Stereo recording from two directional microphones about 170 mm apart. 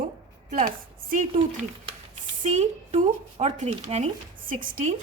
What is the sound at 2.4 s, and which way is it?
A woman's voice, 45° right (ahead or behind).